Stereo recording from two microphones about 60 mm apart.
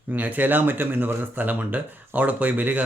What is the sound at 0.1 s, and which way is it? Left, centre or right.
Speech, right.